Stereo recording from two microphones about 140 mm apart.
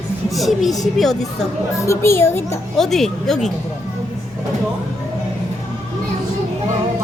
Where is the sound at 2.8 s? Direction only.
Centre (ahead or behind).